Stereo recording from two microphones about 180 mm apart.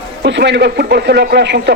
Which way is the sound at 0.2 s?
75° right (ahead or behind).